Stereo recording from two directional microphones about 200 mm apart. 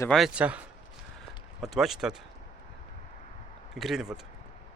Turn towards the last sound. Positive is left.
turn(degrees=0)  # may be behind; listen again after turning